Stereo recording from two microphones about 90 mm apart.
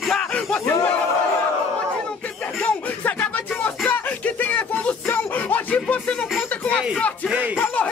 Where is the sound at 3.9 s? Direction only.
20° left (ahead or behind).